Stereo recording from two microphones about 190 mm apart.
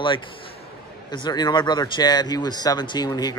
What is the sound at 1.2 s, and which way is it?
Speech, 20° left (ahead or behind).